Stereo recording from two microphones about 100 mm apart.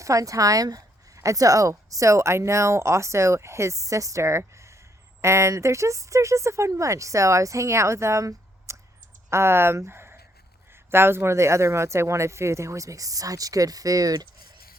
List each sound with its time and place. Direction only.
0.0 s speech: 35° right (ahead or behind)